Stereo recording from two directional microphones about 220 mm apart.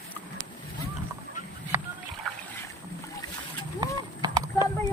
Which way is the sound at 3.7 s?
20° right (ahead or behind).